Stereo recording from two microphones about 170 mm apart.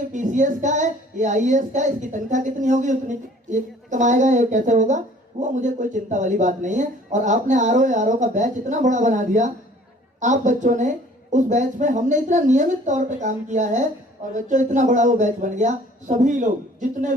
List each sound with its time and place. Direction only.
0.1 s speech: 45° right (ahead or behind)